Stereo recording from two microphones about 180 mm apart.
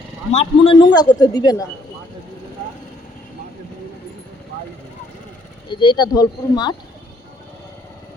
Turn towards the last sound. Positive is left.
turn(degrees=25)  # may be behind; listen again after turning